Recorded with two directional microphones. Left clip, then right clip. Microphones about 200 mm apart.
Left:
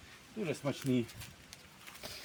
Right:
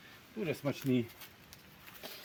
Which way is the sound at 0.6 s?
10° left (ahead or behind).